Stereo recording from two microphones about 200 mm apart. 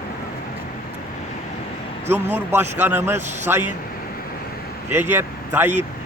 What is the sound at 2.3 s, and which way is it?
Speech, 10° right (ahead or behind).